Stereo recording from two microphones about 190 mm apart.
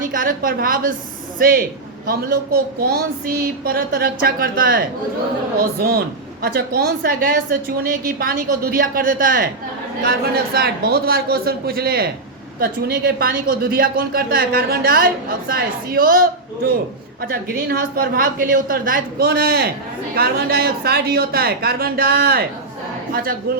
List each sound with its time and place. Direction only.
0.0 s a woman's voice: 45° right (ahead or behind)
23.5 s a woman's voice: 50° right (ahead or behind)